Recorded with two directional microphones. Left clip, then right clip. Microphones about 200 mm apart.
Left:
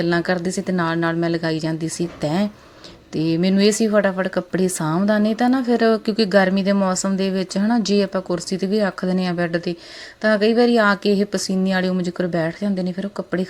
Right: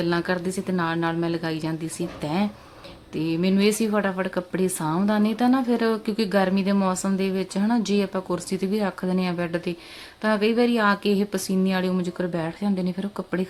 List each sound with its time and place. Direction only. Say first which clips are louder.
0.0 s speech: left 4 dB; 25° left (ahead or behind)